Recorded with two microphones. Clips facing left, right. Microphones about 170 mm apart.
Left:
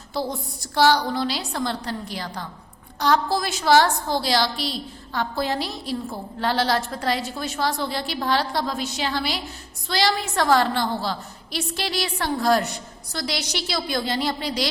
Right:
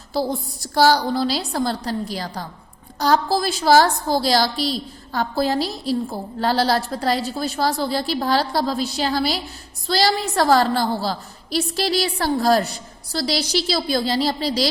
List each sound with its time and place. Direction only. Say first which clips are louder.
0.1 s a woman's voice: right 4 dB; 35° right (ahead or behind)